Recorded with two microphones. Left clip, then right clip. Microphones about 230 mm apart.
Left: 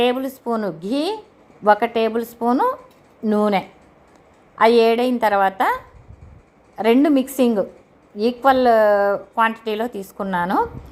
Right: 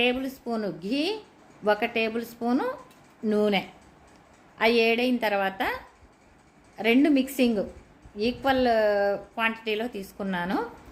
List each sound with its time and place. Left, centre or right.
0.0 s a woman's voice: centre
4.5 s a woman's voice: centre
6.7 s a woman's voice: centre